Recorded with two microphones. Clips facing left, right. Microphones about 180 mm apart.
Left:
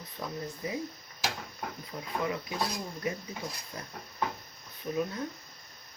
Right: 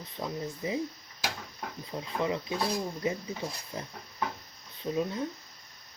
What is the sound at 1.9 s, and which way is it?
Speech, 25° right (ahead or behind).